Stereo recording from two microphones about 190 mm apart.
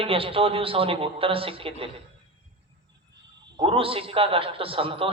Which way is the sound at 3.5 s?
30° right (ahead or behind).